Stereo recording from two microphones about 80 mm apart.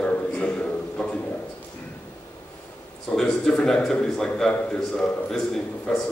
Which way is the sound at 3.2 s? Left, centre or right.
Centre.